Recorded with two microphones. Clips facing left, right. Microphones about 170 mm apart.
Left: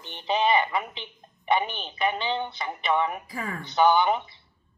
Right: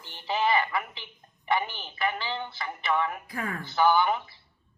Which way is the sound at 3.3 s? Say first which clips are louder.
Even; centre (ahead or behind).